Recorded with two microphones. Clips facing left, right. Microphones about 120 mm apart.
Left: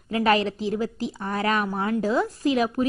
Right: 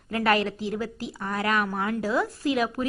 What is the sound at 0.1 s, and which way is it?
A woman's voice, 20° left (ahead or behind).